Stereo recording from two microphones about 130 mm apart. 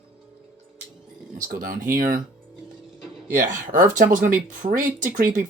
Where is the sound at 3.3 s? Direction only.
90° right.